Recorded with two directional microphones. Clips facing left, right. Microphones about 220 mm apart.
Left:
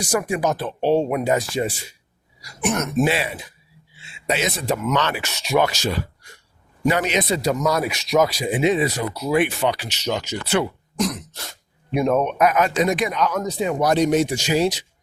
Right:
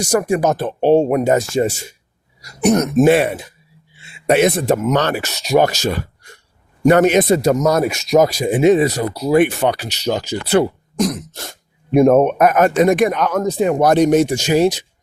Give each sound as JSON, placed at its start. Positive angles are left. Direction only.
{"t": 0.0, "sound": "speech", "side_deg": -45}
{"t": 3.1, "sound": "speech", "side_deg": -55}
{"t": 9.4, "sound": "speech", "side_deg": -50}